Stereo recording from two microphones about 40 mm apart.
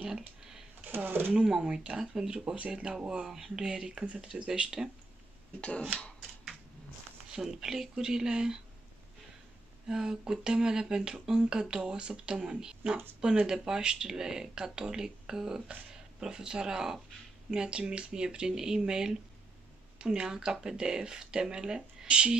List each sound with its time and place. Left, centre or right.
0.9 s speech: right
1.3 s speech: right
7.2 s speech: centre
9.8 s speech: centre